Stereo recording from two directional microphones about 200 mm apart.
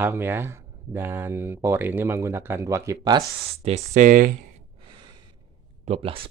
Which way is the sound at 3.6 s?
35° right (ahead or behind).